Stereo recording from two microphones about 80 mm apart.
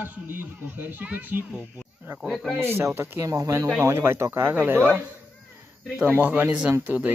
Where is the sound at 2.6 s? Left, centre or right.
Right.